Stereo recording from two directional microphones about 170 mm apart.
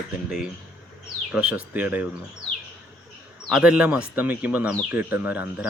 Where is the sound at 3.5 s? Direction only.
5° right (ahead or behind).